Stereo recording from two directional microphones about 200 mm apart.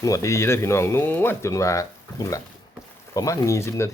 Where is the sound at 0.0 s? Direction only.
15° left (ahead or behind).